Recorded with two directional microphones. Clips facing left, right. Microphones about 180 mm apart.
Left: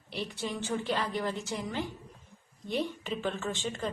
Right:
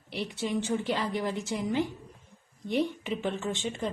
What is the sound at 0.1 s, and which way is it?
A woman's voice, 20° right (ahead or behind).